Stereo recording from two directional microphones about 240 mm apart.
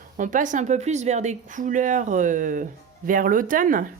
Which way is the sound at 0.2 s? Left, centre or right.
Right.